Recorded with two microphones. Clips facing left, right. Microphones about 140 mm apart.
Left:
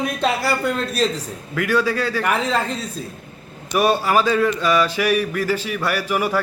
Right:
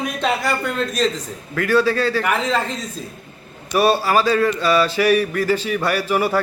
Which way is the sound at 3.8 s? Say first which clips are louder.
Right 1 dB; 15° left (ahead or behind).